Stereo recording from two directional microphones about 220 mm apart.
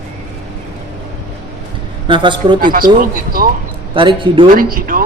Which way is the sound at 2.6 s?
40° right (ahead or behind).